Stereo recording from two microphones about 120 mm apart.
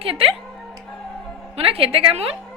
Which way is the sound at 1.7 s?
50° right (ahead or behind).